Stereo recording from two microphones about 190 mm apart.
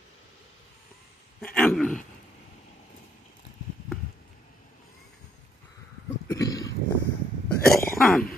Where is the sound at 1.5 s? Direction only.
5° left (ahead or behind).